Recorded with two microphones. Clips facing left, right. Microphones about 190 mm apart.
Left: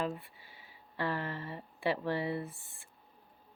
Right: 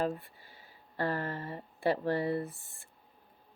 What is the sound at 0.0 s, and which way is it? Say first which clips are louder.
Speech: right 3 dB; 45° right (ahead or behind).